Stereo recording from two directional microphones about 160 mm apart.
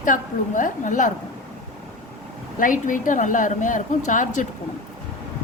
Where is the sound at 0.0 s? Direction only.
55° left (ahead or behind).